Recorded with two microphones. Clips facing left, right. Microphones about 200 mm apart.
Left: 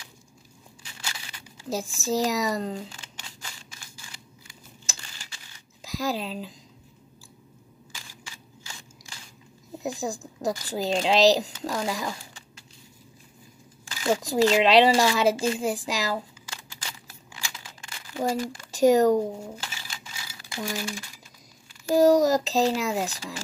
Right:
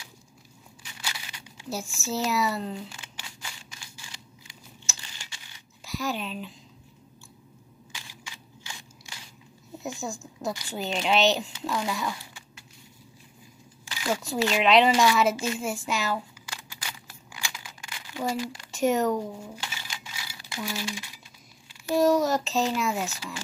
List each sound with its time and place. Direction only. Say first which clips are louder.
1.6 s speech: left 4 dB; 35° left (ahead or behind)
5.9 s speech: left 2 dB; 35° left (ahead or behind)
9.8 s a woman's voice: left 4 dB; 35° left (ahead or behind)
13.8 s a woman's voice: left 4 dB; 40° left (ahead or behind)
17.6 s a sound: right 1 dB; 35° left (ahead or behind)
18.3 s speech: left 2 dB; 40° left (ahead or behind)
20.6 s speech: left 2 dB; 50° left (ahead or behind)
21.8 s a woman's voice: left 4 dB; 35° left (ahead or behind)